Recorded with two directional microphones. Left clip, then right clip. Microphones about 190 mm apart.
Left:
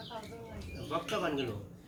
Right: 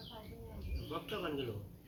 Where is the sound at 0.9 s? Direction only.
40° left (ahead or behind).